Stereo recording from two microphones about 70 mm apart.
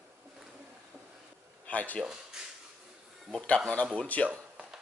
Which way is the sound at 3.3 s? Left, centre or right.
Centre.